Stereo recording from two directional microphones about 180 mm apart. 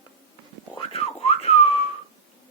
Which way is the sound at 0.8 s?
35° left (ahead or behind).